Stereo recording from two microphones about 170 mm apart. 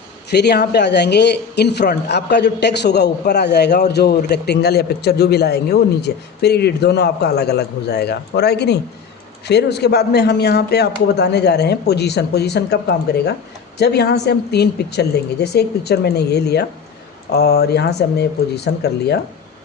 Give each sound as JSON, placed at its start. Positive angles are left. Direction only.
{"t": 0.3, "sound": "a man's voice", "side_deg": 80}